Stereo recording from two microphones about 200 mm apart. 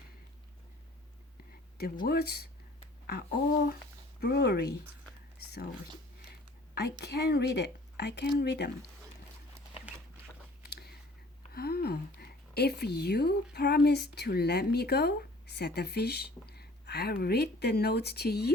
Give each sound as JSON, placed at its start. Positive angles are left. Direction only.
{"t": 1.8, "sound": "speech", "side_deg": 50}
{"t": 7.0, "sound": "speech", "side_deg": 55}
{"t": 10.6, "sound": "a sound", "side_deg": 55}
{"t": 11.5, "sound": "a woman's voice", "side_deg": 50}